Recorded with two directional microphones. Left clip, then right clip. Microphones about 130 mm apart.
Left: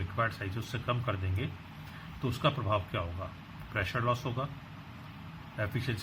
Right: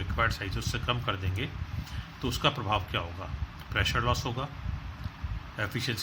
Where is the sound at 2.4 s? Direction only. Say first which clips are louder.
Right 2 dB; 30° right (ahead or behind).